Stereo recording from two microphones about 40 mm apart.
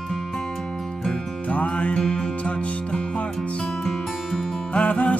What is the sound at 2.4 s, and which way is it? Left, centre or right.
Music, left.